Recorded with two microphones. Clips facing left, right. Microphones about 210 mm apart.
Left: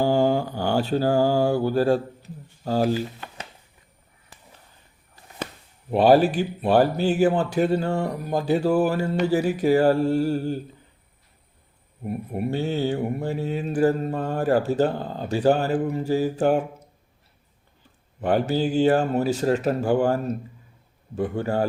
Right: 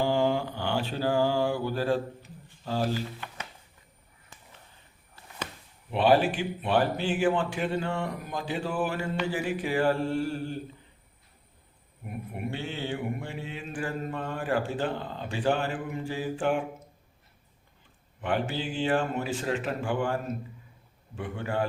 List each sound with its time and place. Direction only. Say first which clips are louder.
0.0 s mantra: left 5 dB; 40° left (ahead or behind)
5.9 s speech: left 6 dB; 40° left (ahead or behind)
12.0 s speech: left 8 dB; 35° left (ahead or behind)
18.2 s speech: left 8 dB; 40° left (ahead or behind)
21.2 s speech: left 7 dB; 40° left (ahead or behind)